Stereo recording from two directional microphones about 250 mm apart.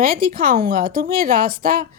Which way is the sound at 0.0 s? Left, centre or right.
Right.